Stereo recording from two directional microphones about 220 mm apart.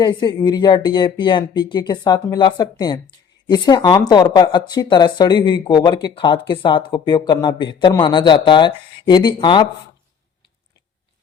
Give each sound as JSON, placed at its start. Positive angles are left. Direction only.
{"t": 0.0, "sound": "speech", "side_deg": 20}